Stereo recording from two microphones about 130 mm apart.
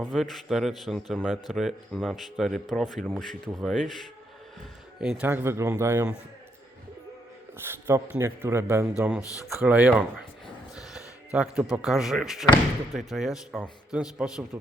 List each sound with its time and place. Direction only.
0.0 s a man's voice: centre (ahead or behind); by 6.1 s 20° right (ahead or behind)
7.6 s a man's voice: 20° right (ahead or behind)
8.9 s speech: 10° right (ahead or behind)
9.3 s speech: 25° left (ahead or behind)
9.6 s speech: 10° right (ahead or behind)
10.9 s a sound: 10° right (ahead or behind)
11.7 s a man's voice: 5° right (ahead or behind)